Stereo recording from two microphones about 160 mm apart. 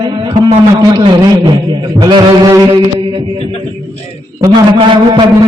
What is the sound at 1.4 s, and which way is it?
A man's voice, 30° right (ahead or behind).